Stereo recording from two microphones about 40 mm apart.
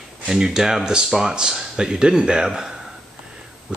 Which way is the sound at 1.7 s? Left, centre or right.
Right.